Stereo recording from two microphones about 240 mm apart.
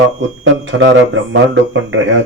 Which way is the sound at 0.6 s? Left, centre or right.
Right.